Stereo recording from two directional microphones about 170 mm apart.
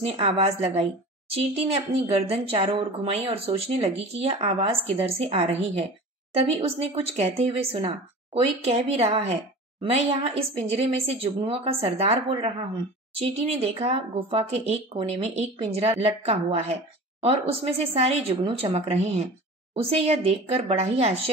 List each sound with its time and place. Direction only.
0.0 s speech: 35° right (ahead or behind)